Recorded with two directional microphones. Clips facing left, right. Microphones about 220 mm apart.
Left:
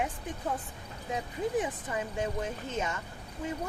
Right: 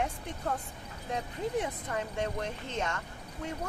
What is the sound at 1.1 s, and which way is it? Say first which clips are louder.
Speech: left 2 dB; 5° left (ahead or behind).